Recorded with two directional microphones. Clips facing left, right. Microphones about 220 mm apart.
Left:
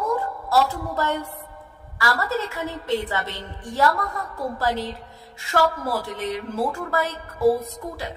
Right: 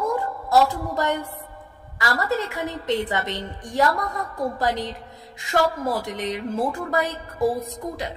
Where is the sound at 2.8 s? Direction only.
20° right (ahead or behind).